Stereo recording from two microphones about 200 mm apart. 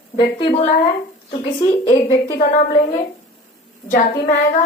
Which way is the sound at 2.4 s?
40° left (ahead or behind).